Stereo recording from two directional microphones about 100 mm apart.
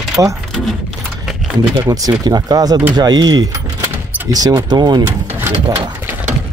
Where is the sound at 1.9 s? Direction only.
35° right (ahead or behind).